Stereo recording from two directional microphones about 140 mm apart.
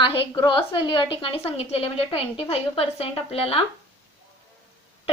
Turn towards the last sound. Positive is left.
turn(degrees=45)  # may be behind; listen again after turning